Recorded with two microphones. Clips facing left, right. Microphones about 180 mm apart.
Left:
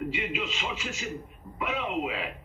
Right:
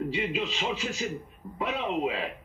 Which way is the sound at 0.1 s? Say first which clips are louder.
Right 3 dB; 35° right (ahead or behind).